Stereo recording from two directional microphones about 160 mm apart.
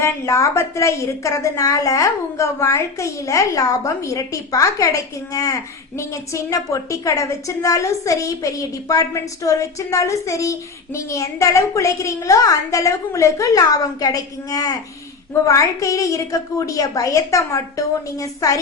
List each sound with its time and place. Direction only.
0.0 s a woman's voice: 20° left (ahead or behind)